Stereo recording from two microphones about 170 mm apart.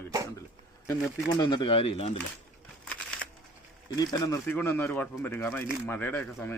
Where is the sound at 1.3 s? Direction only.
25° left (ahead or behind).